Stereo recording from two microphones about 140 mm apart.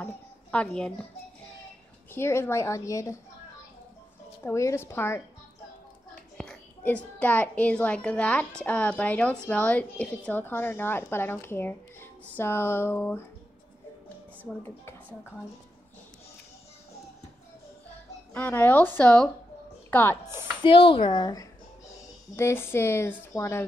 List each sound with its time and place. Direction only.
0.0 s a sound: 10° left (ahead or behind)
2.1 s a woman's voice: 20° left (ahead or behind)
4.4 s a woman's voice: 20° left (ahead or behind)
6.3 s a sound: 5° left (ahead or behind)
7.2 s a woman's voice: 10° left (ahead or behind)
18.3 s a woman's voice: 10° left (ahead or behind)
20.6 s speech: 40° left (ahead or behind)
22.3 s a woman's voice: 15° left (ahead or behind)